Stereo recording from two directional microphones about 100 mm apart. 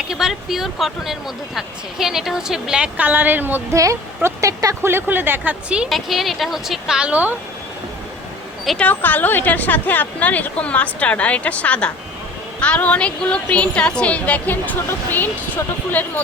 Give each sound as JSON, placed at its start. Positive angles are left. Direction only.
{"t": 0.1, "sound": "speech", "side_deg": -5}
{"t": 3.8, "sound": "speech", "side_deg": -30}
{"t": 8.8, "sound": "a woman's voice", "side_deg": 20}